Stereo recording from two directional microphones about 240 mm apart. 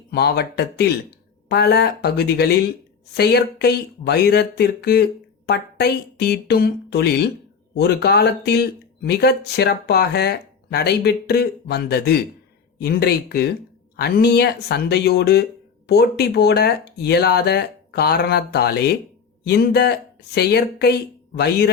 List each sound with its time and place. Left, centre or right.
0.1 s speech: left